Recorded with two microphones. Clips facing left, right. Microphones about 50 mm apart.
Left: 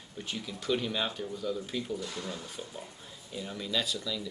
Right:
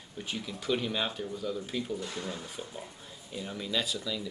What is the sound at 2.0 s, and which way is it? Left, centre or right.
Speech, right.